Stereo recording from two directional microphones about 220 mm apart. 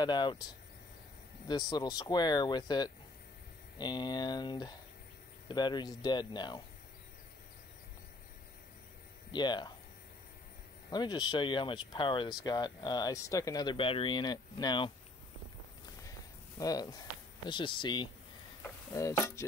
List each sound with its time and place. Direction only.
0.0 s speech: 20° left (ahead or behind)
1.5 s speech: 20° left (ahead or behind)
9.3 s speech: 20° left (ahead or behind)
10.9 s speech: 20° left (ahead or behind)
16.5 s speech: 15° left (ahead or behind)